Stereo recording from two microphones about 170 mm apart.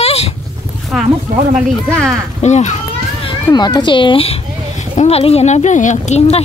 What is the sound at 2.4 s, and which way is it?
Speech, 40° left (ahead or behind).